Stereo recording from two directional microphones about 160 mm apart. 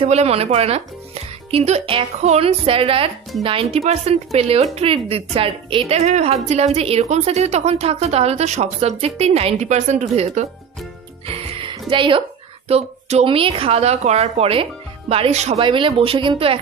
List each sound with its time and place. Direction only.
0.0 s a woman's voice: 40° right (ahead or behind)
11.2 s music: 35° right (ahead or behind)
11.9 s a woman's voice: 30° right (ahead or behind)